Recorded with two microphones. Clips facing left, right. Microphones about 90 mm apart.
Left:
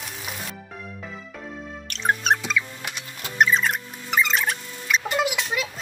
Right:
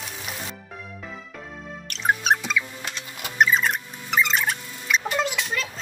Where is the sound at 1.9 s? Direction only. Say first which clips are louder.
Even; centre (ahead or behind).